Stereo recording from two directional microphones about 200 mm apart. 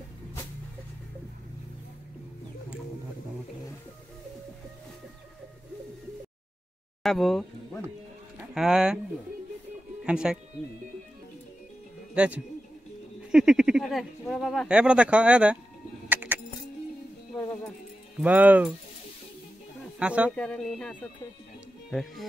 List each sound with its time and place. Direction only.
7.0 s speech: centre (ahead or behind)
8.5 s speech: 5° right (ahead or behind)
10.0 s speech: 5° right (ahead or behind)
12.1 s speech: 5° right (ahead or behind)
16.1 s music: 10° right (ahead or behind)
18.2 s speech: 10° right (ahead or behind)
20.0 s speech: 5° right (ahead or behind)